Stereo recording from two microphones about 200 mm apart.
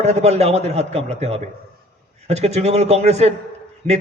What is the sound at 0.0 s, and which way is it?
A man's voice, 35° right (ahead or behind).